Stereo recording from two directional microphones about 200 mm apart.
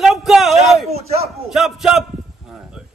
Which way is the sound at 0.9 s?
30° right (ahead or behind).